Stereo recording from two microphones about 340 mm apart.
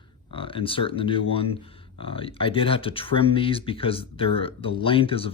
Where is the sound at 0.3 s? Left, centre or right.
Centre.